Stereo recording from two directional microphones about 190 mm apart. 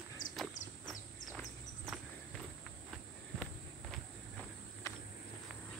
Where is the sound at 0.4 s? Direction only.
Centre (ahead or behind).